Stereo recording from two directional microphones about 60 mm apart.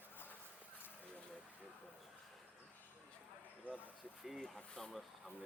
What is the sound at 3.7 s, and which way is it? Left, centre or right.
Speech, right.